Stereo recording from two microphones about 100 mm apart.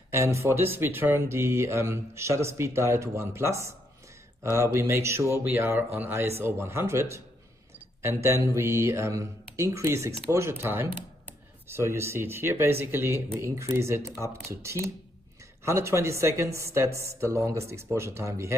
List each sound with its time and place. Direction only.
0.1 s speech: 30° right (ahead or behind)